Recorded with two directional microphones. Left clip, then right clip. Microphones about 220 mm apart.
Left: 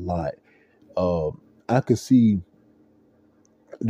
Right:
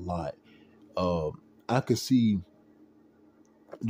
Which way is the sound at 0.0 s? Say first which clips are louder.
Left 7 dB; 15° left (ahead or behind).